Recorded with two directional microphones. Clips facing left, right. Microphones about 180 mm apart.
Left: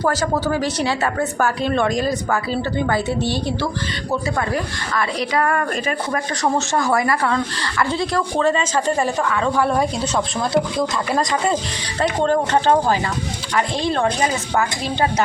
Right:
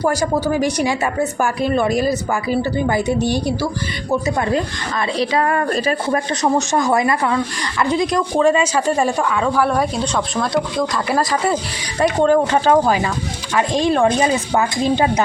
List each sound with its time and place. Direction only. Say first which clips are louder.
0.0 s speech: right 2 dB; 10° right (ahead or behind)
4.4 s speech: right 3 dB; 25° right (ahead or behind)
5.7 s speech: right 4 dB; 35° right (ahead or behind)
6.4 s speech: right 1 dB; 20° right (ahead or behind)